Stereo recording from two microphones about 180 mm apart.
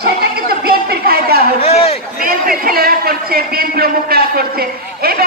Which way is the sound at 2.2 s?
55° right (ahead or behind).